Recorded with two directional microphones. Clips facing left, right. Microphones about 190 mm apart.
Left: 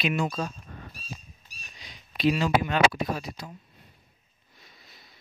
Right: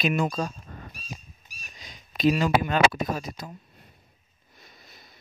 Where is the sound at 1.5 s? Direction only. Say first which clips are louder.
Right 2 dB; 45° right (ahead or behind).